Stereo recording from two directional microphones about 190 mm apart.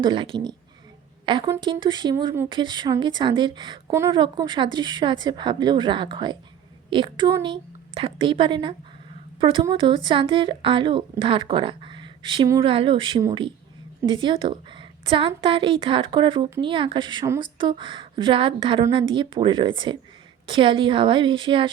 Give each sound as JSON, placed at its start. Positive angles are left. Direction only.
{"t": 0.0, "sound": "a woman's voice", "side_deg": -25}